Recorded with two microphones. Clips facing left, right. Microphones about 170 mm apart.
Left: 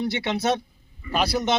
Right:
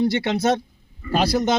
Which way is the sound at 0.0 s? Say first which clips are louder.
Right 5 dB; 40° right (ahead or behind).